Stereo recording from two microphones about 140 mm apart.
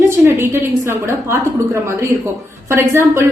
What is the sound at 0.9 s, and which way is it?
A woman's voice, 20° right (ahead or behind).